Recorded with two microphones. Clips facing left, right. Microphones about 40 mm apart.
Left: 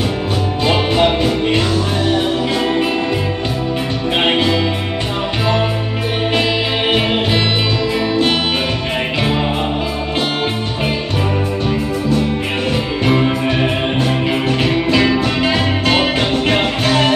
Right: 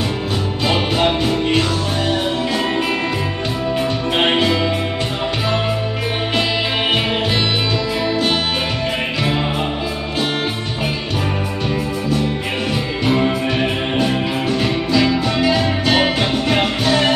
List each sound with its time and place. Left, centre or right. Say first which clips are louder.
14.9 s music: left 1 dB; left